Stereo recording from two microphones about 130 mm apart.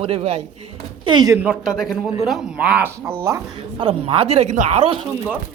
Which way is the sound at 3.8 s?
45° right (ahead or behind).